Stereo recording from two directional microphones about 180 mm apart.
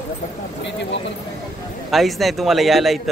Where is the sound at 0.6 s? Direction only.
80° left.